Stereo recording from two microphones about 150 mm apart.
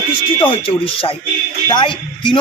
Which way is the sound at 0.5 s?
40° left (ahead or behind).